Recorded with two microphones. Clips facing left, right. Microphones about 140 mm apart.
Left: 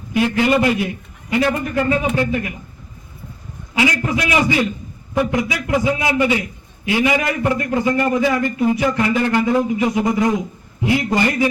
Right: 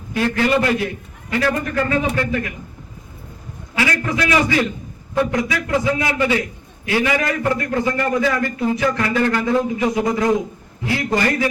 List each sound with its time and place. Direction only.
0.1 s a man's voice: 15° left (ahead or behind)
3.8 s a man's voice: 20° left (ahead or behind)